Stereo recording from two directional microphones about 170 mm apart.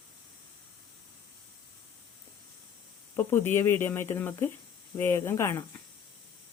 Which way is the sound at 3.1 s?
15° left (ahead or behind).